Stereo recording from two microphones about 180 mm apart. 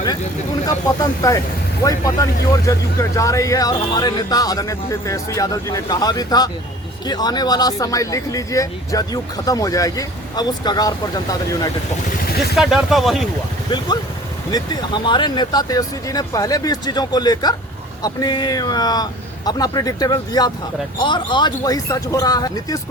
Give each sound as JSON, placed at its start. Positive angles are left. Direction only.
{"t": 0.9, "sound": "speech", "side_deg": 20}
{"t": 12.5, "sound": "speech", "side_deg": 0}
{"t": 13.7, "sound": "speech", "side_deg": 25}